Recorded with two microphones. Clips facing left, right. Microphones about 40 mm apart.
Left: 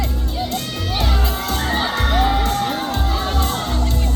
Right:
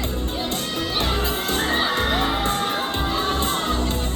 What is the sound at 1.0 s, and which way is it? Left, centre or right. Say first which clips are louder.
Crowd: left 2 dB; right.